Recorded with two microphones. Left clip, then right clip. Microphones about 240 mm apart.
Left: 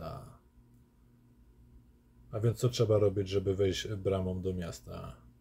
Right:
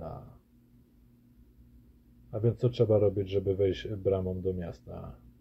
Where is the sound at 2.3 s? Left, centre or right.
Centre.